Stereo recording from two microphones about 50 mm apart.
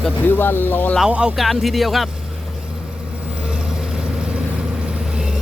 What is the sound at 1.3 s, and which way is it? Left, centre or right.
Speech, centre.